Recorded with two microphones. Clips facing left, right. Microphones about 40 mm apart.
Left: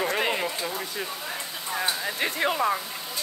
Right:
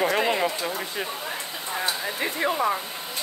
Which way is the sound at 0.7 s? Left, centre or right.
Centre.